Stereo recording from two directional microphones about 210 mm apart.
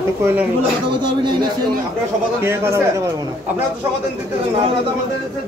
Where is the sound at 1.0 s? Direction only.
20° right (ahead or behind).